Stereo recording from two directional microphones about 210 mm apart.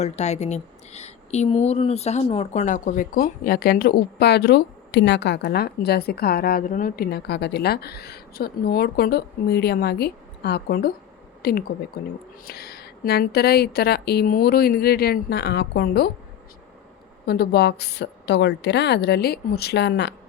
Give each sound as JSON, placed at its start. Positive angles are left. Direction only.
{"t": 0.0, "sound": "speech", "side_deg": 30}
{"t": 17.2, "sound": "speech", "side_deg": 45}